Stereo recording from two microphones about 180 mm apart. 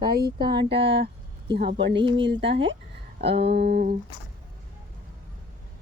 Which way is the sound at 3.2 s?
70° right (ahead or behind).